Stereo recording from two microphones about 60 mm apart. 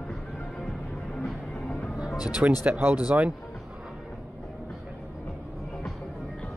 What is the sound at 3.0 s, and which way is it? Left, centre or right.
Speech, centre.